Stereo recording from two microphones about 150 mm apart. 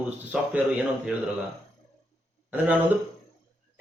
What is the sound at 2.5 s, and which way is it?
Speech, 10° right (ahead or behind).